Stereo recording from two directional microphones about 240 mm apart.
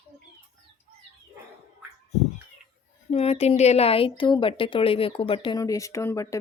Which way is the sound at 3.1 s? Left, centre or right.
Left.